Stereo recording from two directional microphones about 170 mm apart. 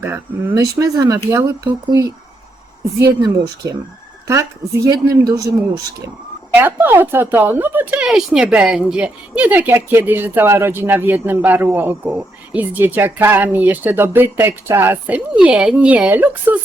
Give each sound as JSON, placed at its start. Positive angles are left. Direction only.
{"t": 0.0, "sound": "speech", "side_deg": -15}
{"t": 3.2, "sound": "speech", "side_deg": -20}
{"t": 4.9, "sound": "speech", "side_deg": -20}
{"t": 6.6, "sound": "speech", "side_deg": -10}